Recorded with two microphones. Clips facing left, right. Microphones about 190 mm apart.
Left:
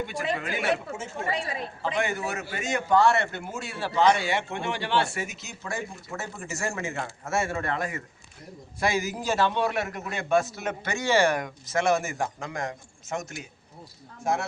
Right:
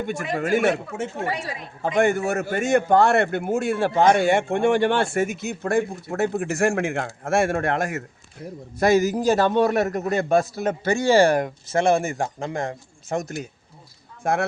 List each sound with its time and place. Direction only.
0.0 s a man's voice: 50° right (ahead or behind)
7.3 s a man's voice: 90° right
8.8 s a man's voice: 40° right (ahead or behind)
14.3 s speech: 60° right (ahead or behind)